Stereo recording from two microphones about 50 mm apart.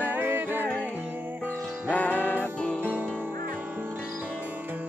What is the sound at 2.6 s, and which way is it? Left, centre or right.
Music, left.